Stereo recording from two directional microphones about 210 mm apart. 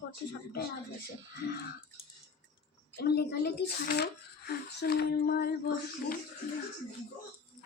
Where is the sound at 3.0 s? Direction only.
50° left (ahead or behind).